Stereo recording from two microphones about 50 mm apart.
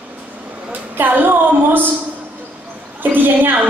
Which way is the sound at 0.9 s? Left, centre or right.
Right.